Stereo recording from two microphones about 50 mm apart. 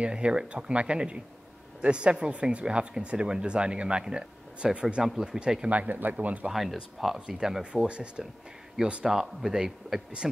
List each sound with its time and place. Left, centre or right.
0.0 s speech: right
5.0 s speech: centre
5.7 s speech: right
6.5 s speech: centre
7.2 s speech: centre
9.1 s speech: centre